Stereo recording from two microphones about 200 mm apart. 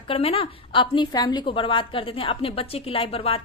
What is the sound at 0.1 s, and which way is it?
A woman's voice, 30° left (ahead or behind).